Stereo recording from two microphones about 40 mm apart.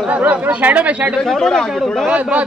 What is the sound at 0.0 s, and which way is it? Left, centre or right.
Speech, right.